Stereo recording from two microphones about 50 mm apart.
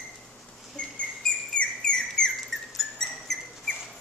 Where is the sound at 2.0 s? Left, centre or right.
Centre.